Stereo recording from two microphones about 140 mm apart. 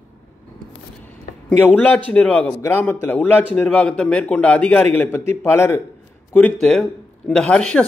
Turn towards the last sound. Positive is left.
turn(degrees=5)  # may be behind; listen again after turning